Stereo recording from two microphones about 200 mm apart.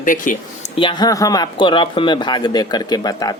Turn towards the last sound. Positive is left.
turn(degrees=20)  # may be behind; listen again after turning